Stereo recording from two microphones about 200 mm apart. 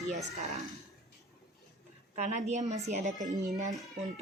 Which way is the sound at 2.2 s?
35° right (ahead or behind).